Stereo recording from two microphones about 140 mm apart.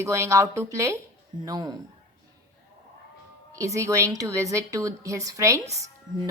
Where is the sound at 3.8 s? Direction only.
20° right (ahead or behind).